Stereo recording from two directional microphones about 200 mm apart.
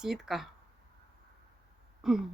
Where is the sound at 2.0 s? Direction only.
Centre (ahead or behind).